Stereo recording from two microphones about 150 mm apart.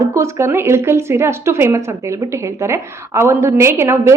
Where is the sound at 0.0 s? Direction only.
20° right (ahead or behind).